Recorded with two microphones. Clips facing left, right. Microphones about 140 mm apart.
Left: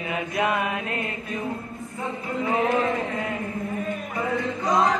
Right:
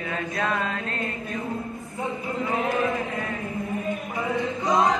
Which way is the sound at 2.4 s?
25° left (ahead or behind).